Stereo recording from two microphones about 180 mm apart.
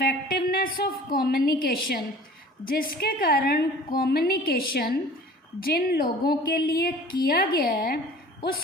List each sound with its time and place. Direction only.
0.0 s a woman's voice: 60° left (ahead or behind)